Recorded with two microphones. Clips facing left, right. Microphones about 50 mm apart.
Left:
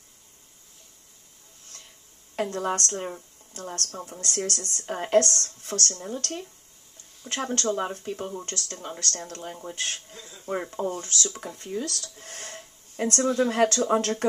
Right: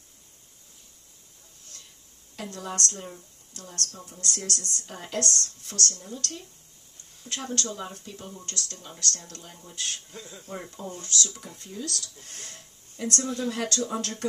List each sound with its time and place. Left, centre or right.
1.7 s music: left
2.3 s speech: left